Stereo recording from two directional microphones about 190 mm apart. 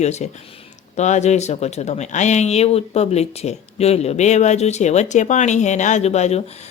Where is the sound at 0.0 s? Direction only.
35° left (ahead or behind).